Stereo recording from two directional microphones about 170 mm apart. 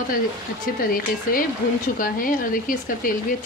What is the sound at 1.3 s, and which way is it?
Speech, 55° left (ahead or behind).